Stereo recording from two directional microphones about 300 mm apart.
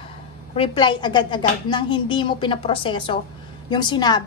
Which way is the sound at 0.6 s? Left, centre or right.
Centre.